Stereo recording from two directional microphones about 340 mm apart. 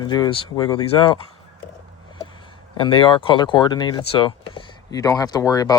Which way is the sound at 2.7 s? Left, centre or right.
Centre.